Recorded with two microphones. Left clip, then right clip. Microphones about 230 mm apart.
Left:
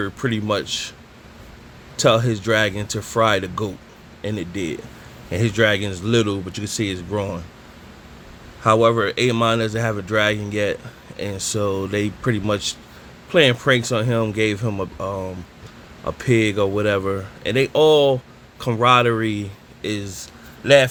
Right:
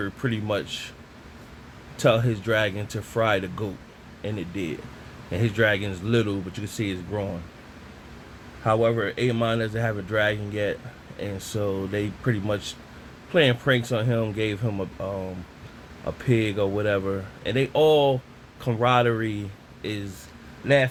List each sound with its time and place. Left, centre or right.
0.0 s speech: left
2.0 s speech: left
8.6 s speech: left